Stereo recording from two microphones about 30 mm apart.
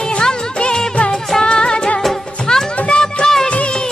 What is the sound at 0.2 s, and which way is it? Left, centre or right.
Music of bollywood, left.